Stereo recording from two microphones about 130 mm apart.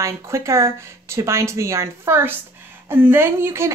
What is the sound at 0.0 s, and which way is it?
A woman's voice, 20° right (ahead or behind).